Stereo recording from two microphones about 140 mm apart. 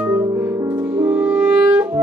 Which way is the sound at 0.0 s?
15° right (ahead or behind).